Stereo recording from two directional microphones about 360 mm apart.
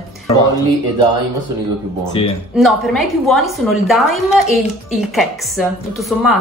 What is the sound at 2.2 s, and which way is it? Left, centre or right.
Speech, centre.